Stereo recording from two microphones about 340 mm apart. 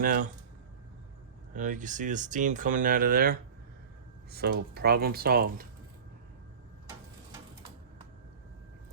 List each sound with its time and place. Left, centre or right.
0.0 s speech: right
1.5 s speech: right